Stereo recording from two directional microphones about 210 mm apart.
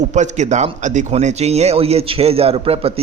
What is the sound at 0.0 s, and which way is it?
A man's voice, 35° right (ahead or behind).